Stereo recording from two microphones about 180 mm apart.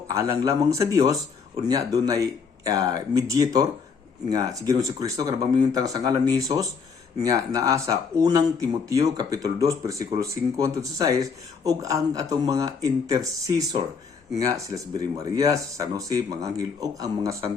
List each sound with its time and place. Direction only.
0.1 s speech: 20° right (ahead or behind)